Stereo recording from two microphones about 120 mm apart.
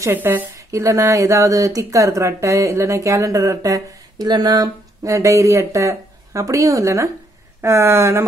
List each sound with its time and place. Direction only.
0.0 s speech: 15° right (ahead or behind)